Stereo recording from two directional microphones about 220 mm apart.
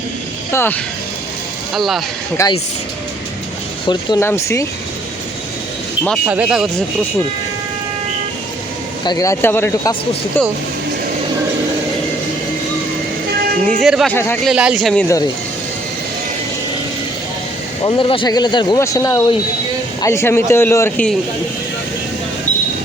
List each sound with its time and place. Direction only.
0.5 s a man's voice: 10° left (ahead or behind)
1.7 s speech: centre (ahead or behind)
2.4 s a man's voice: 15° left (ahead or behind)
3.8 s a man's voice: 15° left (ahead or behind)
6.1 s speech: 5° right (ahead or behind)
9.0 s a man's voice: 15° left (ahead or behind)
13.8 s speech: centre (ahead or behind)
17.8 s a man's voice: 20° left (ahead or behind); by 21.2 s 5° left (ahead or behind)